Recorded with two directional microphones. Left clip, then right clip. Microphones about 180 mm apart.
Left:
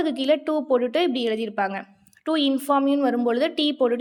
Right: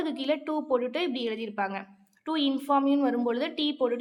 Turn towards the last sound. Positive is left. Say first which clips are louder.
# left 6 dB
turn(degrees=35)  # may be behind; listen again after turning